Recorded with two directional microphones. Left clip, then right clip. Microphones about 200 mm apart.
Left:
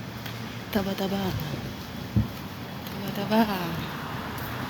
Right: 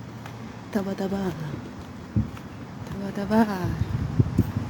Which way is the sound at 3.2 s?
30° right (ahead or behind).